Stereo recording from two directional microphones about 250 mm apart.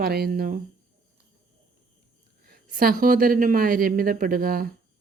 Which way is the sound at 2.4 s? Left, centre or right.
Right.